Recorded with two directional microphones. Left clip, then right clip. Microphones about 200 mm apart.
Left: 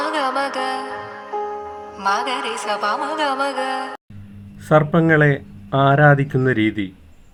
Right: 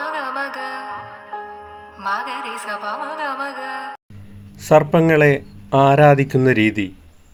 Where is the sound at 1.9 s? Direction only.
25° left (ahead or behind).